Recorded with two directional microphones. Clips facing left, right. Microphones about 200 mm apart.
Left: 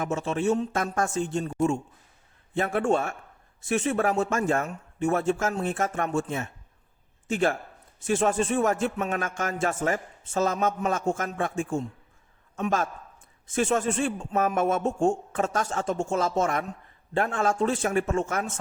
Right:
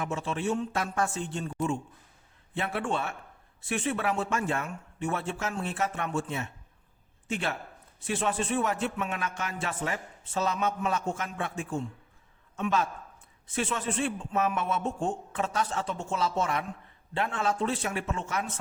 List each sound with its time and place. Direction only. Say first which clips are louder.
0.0 s a man's voice: left 5 dB; 45° left (ahead or behind)